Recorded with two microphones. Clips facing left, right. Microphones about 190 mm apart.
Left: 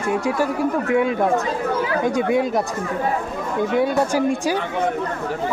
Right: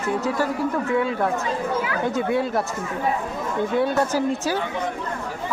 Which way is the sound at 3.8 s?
10° left (ahead or behind).